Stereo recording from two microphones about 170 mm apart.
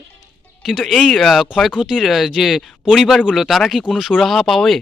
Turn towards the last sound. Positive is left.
turn(degrees=0)  # may be behind; listen again after turning